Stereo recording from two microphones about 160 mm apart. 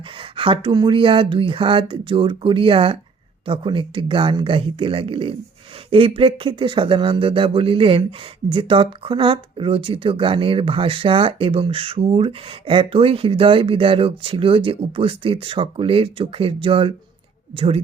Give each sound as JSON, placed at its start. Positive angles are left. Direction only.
{"t": 0.2, "sound": "speech", "side_deg": -35}